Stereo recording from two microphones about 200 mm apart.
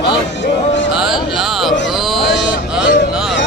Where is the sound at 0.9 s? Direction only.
Centre (ahead or behind).